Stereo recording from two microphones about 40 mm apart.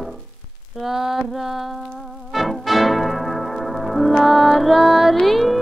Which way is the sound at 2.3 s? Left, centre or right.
Centre.